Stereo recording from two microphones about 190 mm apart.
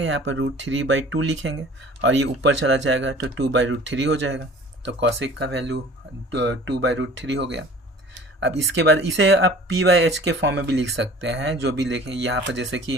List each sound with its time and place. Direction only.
0.0 s speech: 75° right (ahead or behind)